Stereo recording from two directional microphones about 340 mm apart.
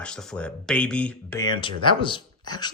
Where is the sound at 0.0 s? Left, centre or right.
Centre.